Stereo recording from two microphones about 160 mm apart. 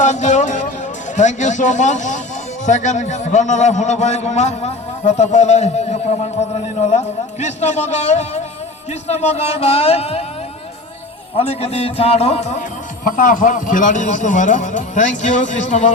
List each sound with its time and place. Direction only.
0.0 s music: 50° left (ahead or behind)
1.1 s a man's voice: 50° left (ahead or behind)
11.3 s speech: 40° left (ahead or behind)
13.1 s a man's voice: 55° left (ahead or behind)